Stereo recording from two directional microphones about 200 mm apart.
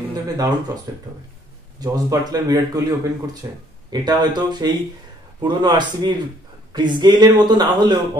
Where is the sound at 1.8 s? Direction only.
20° right (ahead or behind).